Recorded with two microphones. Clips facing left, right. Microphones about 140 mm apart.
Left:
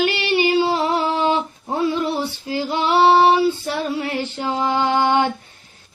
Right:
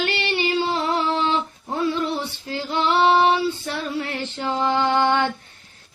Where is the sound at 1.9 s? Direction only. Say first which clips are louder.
Left 3 dB; 10° left (ahead or behind).